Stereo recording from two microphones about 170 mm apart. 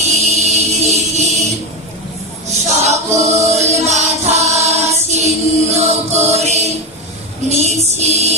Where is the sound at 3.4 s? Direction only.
40° right (ahead or behind).